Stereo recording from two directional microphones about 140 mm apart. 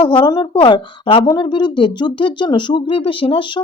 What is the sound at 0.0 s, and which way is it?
Speech, 35° left (ahead or behind).